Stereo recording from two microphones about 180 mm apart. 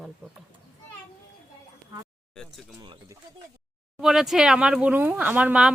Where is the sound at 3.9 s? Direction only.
Centre (ahead or behind).